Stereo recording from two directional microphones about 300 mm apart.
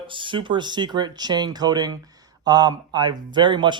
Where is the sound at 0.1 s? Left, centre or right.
Centre.